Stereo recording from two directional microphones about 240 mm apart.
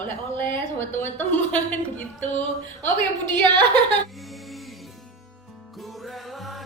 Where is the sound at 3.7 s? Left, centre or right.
Centre.